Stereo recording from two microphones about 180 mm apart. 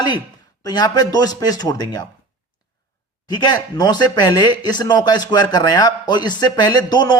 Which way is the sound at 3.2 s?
25° left (ahead or behind).